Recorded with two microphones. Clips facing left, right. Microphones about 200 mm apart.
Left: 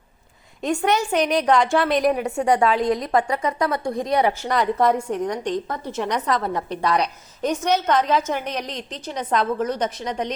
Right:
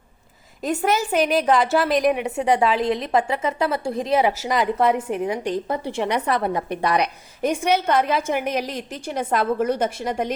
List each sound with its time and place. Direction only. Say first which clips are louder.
0.6 s a woman's voice: left 1 dB; 5° right (ahead or behind)
2.2 s a woman's voice: even; 20° right (ahead or behind)
4.2 s a woman's voice: even; 5° right (ahead or behind)